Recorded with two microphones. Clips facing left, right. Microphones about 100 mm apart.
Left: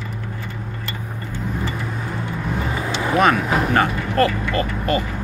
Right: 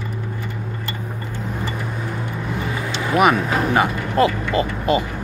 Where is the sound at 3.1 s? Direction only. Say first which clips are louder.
Right 1 dB; 10° right (ahead or behind).